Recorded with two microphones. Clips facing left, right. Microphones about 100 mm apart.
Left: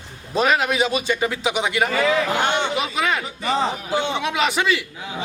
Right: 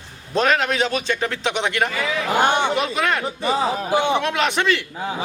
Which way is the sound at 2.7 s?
Centre (ahead or behind).